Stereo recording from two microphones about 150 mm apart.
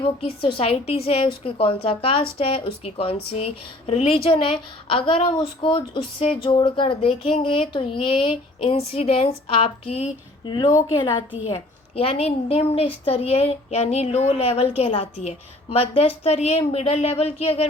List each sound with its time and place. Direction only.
0.2 s a woman's voice: 40° left (ahead or behind)
11.9 s a woman's voice: 40° left (ahead or behind)